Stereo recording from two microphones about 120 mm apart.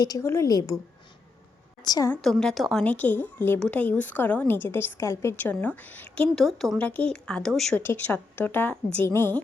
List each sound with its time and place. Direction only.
0.0 s a woman's voice: 30° left (ahead or behind)
1.8 s a woman's voice: 35° left (ahead or behind)
2.2 s speech: 5° left (ahead or behind)
2.8 s a woman's voice: 15° left (ahead or behind)
6.3 s speech: centre (ahead or behind)
6.8 s a woman's voice: 10° left (ahead or behind)